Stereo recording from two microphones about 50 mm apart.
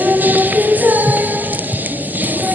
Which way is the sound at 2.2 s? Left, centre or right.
Right.